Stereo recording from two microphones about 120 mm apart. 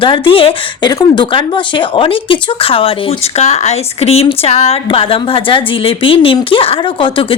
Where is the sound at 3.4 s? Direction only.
60° left (ahead or behind); by 7.2 s 45° left (ahead or behind).